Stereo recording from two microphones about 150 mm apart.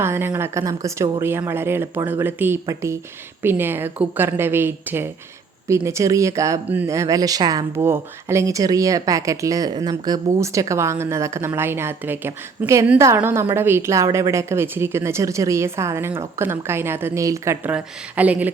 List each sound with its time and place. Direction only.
0.0 s a woman's voice: 15° right (ahead or behind)